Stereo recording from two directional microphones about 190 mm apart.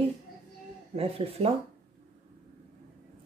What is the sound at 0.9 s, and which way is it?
Speech, 30° right (ahead or behind).